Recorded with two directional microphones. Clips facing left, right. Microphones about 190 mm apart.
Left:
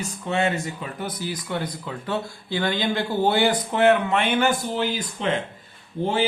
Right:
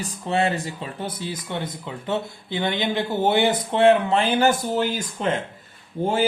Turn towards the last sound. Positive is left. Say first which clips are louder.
# right 1 dB
turn(degrees=-45)  # may be behind; listen again after turning